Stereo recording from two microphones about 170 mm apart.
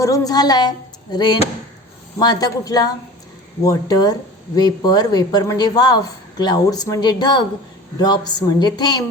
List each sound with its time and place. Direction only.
0.0 s speech: 20° left (ahead or behind)